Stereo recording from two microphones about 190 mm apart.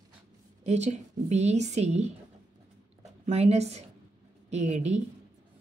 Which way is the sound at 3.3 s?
35° right (ahead or behind).